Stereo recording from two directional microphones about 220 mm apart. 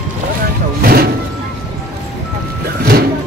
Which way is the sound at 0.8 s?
45° right (ahead or behind).